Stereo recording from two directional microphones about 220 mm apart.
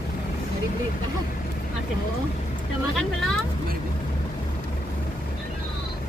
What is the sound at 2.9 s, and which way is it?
Speech, centre (ahead or behind).